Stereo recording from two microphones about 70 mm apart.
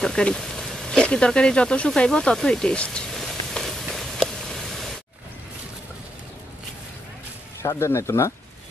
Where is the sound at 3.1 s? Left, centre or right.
Centre.